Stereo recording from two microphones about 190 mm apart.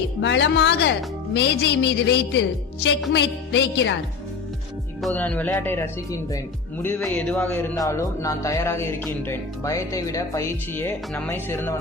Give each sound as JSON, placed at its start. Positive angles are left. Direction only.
{"t": 0.2, "sound": "a woman's voice", "side_deg": 70}
{"t": 5.0, "sound": "a man's voice", "side_deg": 5}